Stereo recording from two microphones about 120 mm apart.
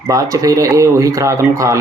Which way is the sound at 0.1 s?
30° right (ahead or behind).